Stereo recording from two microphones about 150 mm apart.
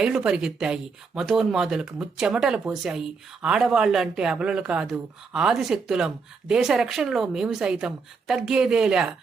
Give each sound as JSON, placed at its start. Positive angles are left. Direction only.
{"t": 0.0, "sound": "speech", "side_deg": -5}